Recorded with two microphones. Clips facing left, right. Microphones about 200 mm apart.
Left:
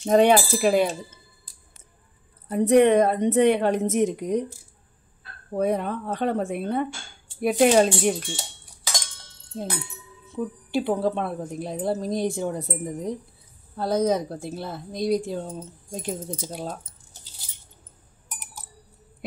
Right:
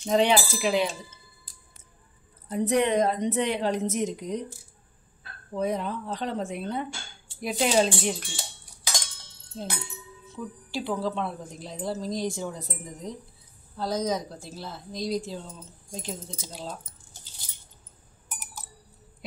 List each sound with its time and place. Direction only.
0.1 s speech: 50° left (ahead or behind)
2.5 s speech: 55° left (ahead or behind)
5.5 s speech: 55° left (ahead or behind)
10.3 s speech: 55° left (ahead or behind)